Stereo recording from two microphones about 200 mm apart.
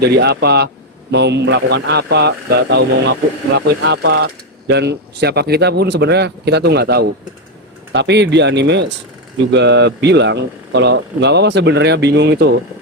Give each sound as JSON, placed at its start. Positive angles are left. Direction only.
{"t": 0.0, "sound": "speech", "side_deg": -55}